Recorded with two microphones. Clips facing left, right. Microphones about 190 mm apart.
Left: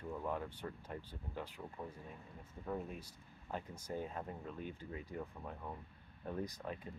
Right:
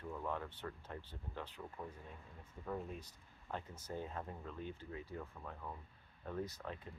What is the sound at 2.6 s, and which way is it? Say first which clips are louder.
Speech: left 1 dB; 10° left (ahead or behind).